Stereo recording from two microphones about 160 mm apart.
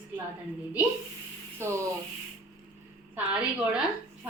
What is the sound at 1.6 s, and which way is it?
Speech, 15° right (ahead or behind).